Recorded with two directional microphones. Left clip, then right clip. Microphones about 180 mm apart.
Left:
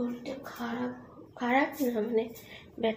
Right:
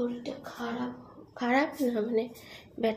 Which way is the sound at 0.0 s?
20° right (ahead or behind).